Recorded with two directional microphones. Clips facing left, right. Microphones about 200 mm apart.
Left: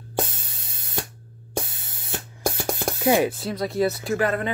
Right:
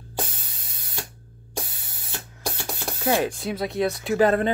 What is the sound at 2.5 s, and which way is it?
Spray, 45° left (ahead or behind).